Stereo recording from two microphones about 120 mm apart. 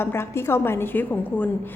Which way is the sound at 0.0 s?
20° left (ahead or behind).